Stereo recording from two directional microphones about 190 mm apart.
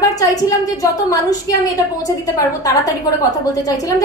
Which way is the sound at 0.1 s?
20° left (ahead or behind).